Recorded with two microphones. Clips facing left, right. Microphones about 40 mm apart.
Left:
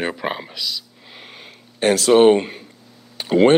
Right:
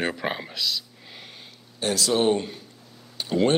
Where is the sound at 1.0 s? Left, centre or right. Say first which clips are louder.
Left 3 dB; centre.